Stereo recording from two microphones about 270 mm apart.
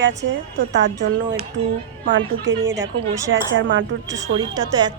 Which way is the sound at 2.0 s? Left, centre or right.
Right.